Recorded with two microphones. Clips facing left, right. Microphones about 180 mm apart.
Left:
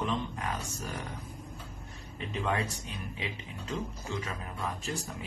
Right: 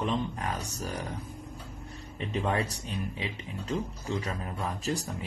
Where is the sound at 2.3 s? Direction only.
35° right (ahead or behind).